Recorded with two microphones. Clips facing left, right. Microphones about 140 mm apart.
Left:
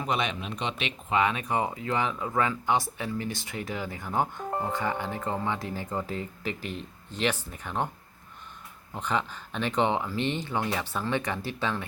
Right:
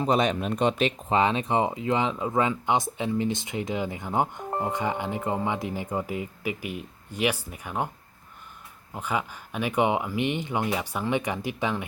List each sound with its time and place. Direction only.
0.0 s speech: 35° right (ahead or behind); by 7.9 s 10° right (ahead or behind)
8.9 s speech: 10° right (ahead or behind)